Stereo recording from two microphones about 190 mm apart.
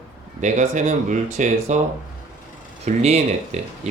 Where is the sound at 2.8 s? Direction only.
35° right (ahead or behind).